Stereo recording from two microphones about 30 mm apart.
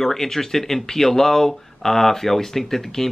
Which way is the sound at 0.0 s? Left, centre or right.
Centre.